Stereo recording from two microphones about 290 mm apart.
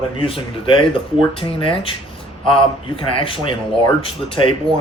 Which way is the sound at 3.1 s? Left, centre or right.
Centre.